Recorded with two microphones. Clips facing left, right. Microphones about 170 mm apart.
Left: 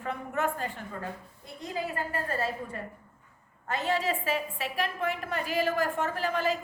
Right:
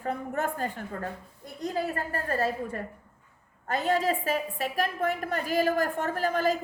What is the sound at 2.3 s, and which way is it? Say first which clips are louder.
A woman's voice: right 4 dB; 40° right (ahead or behind).